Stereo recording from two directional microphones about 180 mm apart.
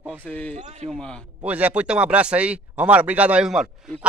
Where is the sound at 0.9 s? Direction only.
5° left (ahead or behind).